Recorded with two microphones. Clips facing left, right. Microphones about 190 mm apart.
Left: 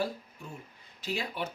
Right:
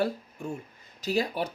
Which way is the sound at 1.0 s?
40° right (ahead or behind).